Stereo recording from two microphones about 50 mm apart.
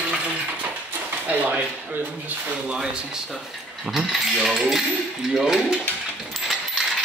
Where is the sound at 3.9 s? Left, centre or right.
Centre.